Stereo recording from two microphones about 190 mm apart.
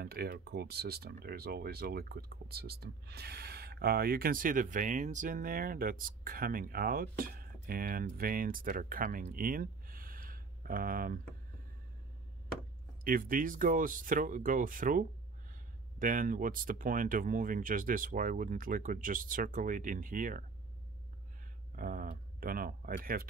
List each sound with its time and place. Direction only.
0.0 s speech: 55° right (ahead or behind)
13.0 s speech: 45° right (ahead or behind)
21.7 s speech: 45° right (ahead or behind)